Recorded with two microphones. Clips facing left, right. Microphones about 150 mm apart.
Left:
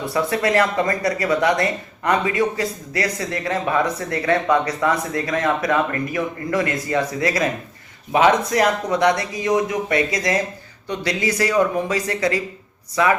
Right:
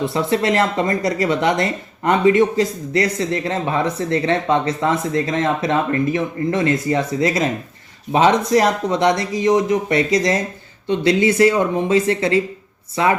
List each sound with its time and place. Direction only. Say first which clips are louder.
0.0 s speech: right 2 dB; 25° right (ahead or behind)